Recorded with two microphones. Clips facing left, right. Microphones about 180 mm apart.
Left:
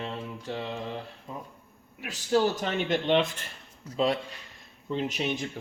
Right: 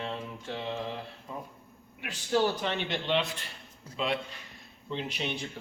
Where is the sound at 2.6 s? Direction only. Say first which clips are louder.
Left 4 dB; 45° left (ahead or behind).